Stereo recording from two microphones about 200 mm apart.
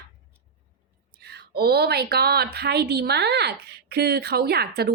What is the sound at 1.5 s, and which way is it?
Speech, 50° right (ahead or behind).